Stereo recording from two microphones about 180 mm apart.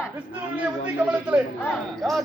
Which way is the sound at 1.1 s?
5° right (ahead or behind).